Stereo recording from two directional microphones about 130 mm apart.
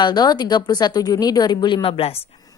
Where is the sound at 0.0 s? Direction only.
35° left (ahead or behind).